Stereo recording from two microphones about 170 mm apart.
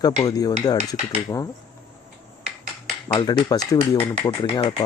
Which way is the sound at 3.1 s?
25° left (ahead or behind).